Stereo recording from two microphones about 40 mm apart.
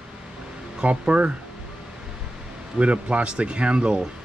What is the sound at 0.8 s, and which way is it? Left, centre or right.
Speech, right.